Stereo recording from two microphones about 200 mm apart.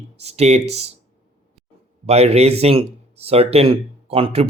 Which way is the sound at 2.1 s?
30° right (ahead or behind).